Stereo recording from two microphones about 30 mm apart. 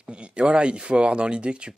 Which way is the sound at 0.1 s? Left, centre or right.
Right.